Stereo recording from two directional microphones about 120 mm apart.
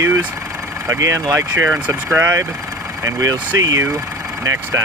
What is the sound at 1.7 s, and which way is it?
Speech, 10° right (ahead or behind).